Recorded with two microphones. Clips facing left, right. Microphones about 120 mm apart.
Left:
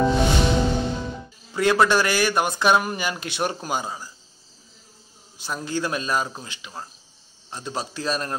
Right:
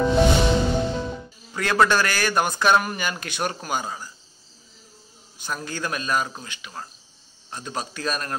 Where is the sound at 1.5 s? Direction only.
15° left (ahead or behind).